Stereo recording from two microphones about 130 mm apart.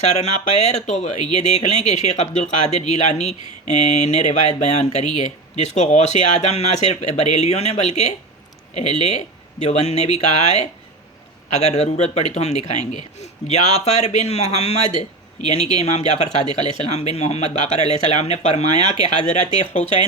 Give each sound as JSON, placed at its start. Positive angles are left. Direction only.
{"t": 0.2, "sound": "speech", "side_deg": 60}